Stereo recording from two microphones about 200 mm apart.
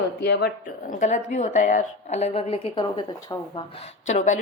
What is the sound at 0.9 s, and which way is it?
A woman's voice, 40° left (ahead or behind).